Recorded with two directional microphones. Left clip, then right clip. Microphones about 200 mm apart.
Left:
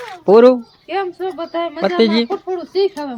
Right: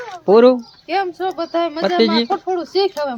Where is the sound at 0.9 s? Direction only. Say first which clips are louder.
Right 2 dB; 20° right (ahead or behind).